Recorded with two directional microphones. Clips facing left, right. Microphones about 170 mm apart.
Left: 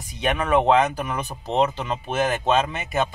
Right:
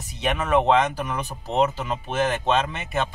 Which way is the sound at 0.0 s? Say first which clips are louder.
Left 2 dB; centre (ahead or behind).